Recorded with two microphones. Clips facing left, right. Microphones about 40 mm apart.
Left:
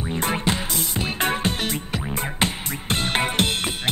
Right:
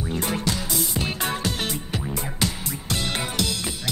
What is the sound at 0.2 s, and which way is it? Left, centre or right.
Music, left.